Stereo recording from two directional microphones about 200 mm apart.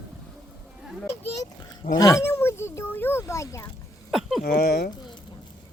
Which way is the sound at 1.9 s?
20° left (ahead or behind).